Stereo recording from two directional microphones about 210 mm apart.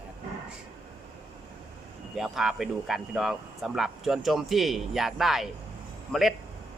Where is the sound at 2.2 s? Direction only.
Centre (ahead or behind).